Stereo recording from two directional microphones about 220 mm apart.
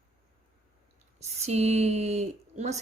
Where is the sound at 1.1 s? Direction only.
30° right (ahead or behind).